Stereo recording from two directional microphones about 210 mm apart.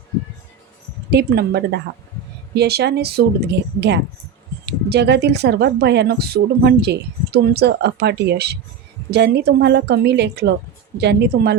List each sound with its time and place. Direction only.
1.1 s speech: 50° right (ahead or behind)